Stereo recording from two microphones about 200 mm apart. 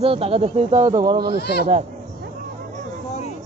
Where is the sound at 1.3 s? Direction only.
55° left (ahead or behind).